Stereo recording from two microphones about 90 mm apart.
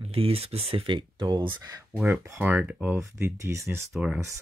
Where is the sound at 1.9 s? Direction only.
20° right (ahead or behind).